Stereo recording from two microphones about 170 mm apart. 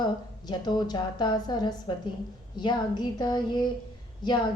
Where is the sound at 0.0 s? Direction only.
25° left (ahead or behind).